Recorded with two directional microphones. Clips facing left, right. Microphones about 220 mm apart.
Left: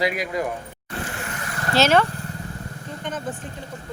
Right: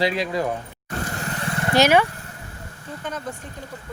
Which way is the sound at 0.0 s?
30° right (ahead or behind).